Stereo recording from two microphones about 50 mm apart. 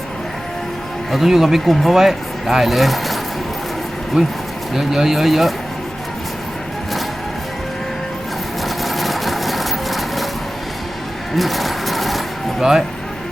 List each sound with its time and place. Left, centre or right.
1.1 s speech: centre
4.1 s speech: centre
8.6 s vehicle: centre
11.3 s vehicle: centre